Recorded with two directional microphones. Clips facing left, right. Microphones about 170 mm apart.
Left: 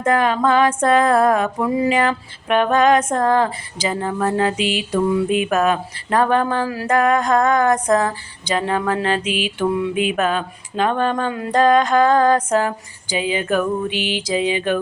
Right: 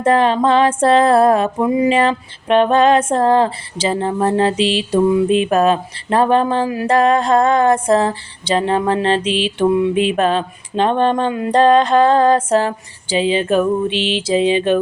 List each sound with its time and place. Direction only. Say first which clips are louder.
0.0 s music: right 3 dB; 30° right (ahead or behind)